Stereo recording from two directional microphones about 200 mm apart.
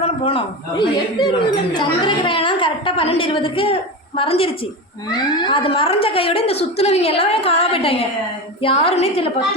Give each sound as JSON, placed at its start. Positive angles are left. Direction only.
{"t": 0.0, "sound": "a woman's voice", "side_deg": 30}